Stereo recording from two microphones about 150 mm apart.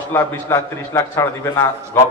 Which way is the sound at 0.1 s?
20° left (ahead or behind).